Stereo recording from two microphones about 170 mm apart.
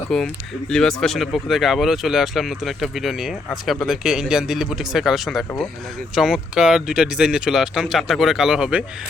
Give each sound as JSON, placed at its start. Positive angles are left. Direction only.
{"t": 0.1, "sound": "speech", "side_deg": 0}